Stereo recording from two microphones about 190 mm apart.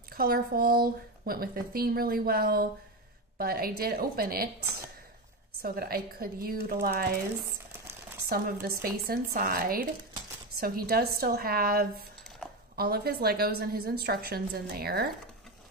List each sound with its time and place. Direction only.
0.1 s speech: 50° right (ahead or behind)
5.6 s speech: 50° right (ahead or behind)